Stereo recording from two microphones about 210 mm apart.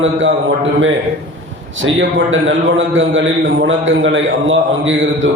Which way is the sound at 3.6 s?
65° right (ahead or behind).